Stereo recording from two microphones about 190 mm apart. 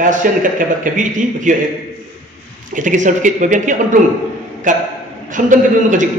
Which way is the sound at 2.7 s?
40° right (ahead or behind).